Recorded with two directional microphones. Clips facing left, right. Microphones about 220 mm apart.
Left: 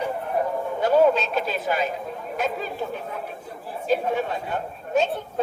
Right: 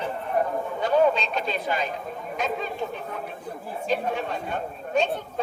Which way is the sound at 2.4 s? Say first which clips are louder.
Left 1 dB; 5° left (ahead or behind).